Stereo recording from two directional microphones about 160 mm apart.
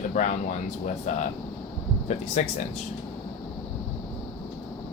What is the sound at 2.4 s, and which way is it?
Speech, 45° left (ahead or behind).